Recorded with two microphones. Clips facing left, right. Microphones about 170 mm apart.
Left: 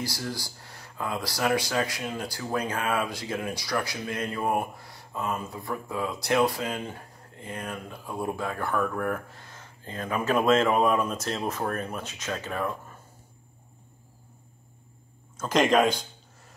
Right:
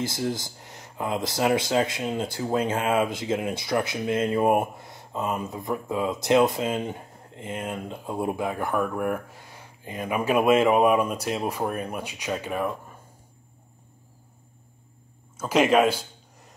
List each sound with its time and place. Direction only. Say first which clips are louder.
0.0 s speech: right 5 dB; 20° right (ahead or behind)
15.3 s speech: right 2 dB; 10° right (ahead or behind)